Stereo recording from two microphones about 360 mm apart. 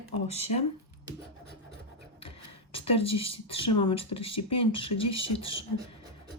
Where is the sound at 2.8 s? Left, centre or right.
Centre.